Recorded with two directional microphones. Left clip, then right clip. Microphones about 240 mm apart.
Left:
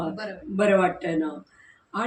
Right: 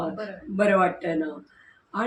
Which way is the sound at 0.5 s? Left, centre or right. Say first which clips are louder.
Even; centre.